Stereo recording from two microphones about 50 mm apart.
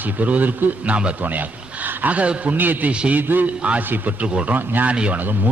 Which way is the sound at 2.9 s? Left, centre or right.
Right.